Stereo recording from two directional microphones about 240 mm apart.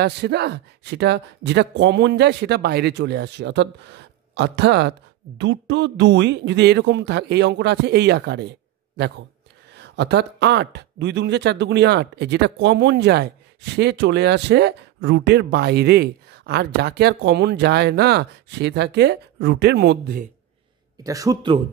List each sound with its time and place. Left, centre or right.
0.0 s speech: right
21.0 s speech: centre